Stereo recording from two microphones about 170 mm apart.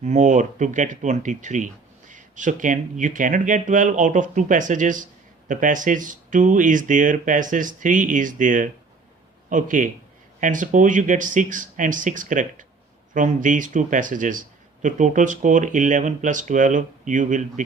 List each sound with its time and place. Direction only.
0.0 s speech: 45° right (ahead or behind)